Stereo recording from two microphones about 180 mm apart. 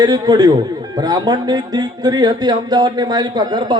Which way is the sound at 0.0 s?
20° right (ahead or behind).